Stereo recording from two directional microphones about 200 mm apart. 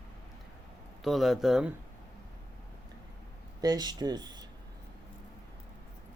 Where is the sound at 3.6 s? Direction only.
20° right (ahead or behind).